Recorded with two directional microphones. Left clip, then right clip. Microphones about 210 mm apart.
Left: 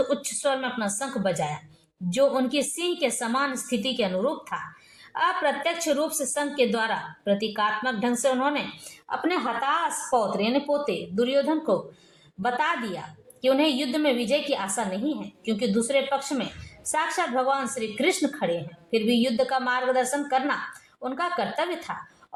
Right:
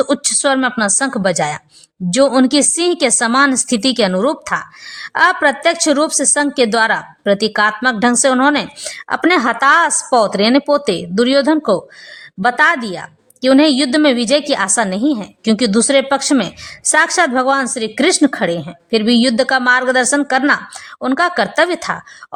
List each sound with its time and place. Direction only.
0.1 s a woman's voice: 50° right (ahead or behind)